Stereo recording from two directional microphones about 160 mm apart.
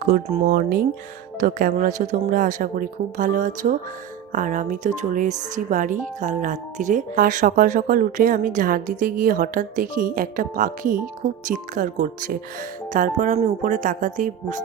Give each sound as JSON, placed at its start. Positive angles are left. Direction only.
{"t": 0.0, "sound": "speech", "side_deg": -55}
{"t": 1.4, "sound": "speech", "side_deg": -55}